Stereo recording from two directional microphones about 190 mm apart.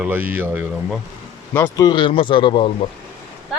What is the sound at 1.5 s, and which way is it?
Speech, 15° left (ahead or behind).